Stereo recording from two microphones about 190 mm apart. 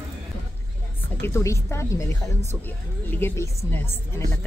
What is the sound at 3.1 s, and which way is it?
Speech, 10° left (ahead or behind).